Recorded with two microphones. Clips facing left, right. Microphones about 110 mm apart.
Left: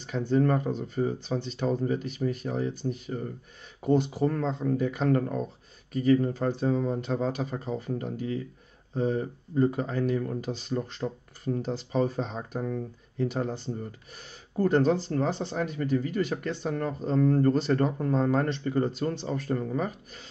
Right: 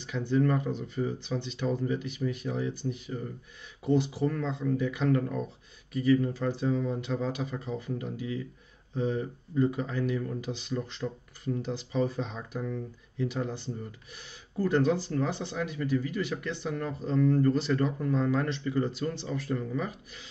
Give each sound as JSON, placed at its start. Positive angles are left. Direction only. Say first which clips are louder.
{"t": 0.0, "sound": "speech", "louder": "left 2 dB", "side_deg": 40}